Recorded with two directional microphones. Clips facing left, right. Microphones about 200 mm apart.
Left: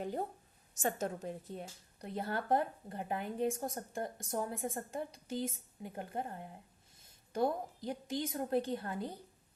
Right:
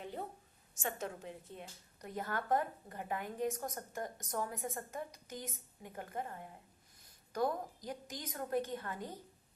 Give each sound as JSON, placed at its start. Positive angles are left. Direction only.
{"t": 0.8, "sound": "a woman's voice", "side_deg": 40}